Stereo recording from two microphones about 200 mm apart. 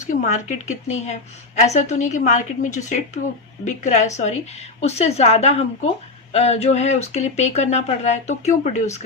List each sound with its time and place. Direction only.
0.0 s speech: 40° left (ahead or behind)